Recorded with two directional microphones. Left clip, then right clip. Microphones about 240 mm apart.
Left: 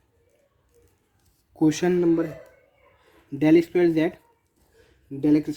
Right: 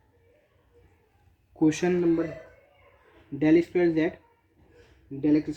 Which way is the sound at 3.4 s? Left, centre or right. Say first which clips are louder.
Left 3 dB; left.